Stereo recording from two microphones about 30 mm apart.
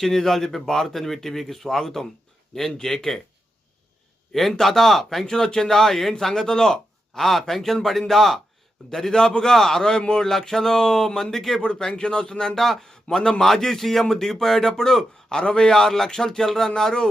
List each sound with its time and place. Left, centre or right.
0.0 s speech: centre
4.3 s a man's voice: centre
5.2 s speech: left
12.5 s speech: centre
12.9 s a man's voice: centre
15.4 s speech: left
15.7 s speech: centre